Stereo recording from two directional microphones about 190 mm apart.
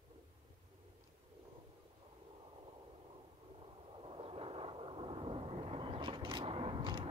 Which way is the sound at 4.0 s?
30° right (ahead or behind).